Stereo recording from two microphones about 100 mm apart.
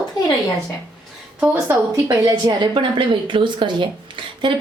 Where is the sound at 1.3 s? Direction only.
15° right (ahead or behind).